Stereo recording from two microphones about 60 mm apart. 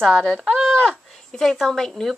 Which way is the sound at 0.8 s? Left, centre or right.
Centre.